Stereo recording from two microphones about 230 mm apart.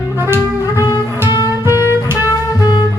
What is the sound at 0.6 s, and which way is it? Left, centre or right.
Music, centre.